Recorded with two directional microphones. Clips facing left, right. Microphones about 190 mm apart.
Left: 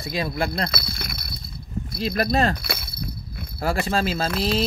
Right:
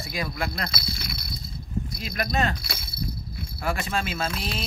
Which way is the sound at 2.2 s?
35° left (ahead or behind).